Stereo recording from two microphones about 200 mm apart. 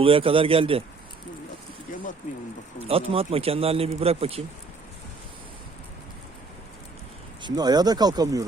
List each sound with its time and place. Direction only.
0.0 s speech: 25° right (ahead or behind)
2.8 s speech: 30° right (ahead or behind)
7.4 s speech: 20° right (ahead or behind)